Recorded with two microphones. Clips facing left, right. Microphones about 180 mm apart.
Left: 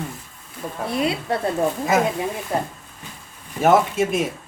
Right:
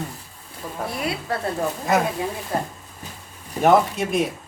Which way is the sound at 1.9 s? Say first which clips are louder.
Even; centre (ahead or behind).